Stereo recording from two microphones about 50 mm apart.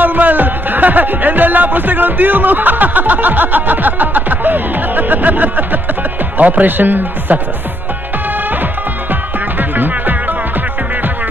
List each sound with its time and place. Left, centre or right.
0.0 s music: right
6.3 s speech: right
9.1 s music: right